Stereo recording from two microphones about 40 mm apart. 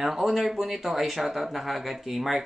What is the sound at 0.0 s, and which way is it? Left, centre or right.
Speech, centre.